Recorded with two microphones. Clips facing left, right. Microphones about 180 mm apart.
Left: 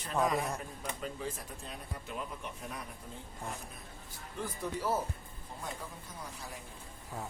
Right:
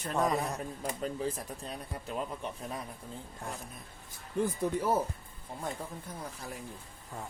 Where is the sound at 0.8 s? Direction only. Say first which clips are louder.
Right 7 dB; 35° right (ahead or behind).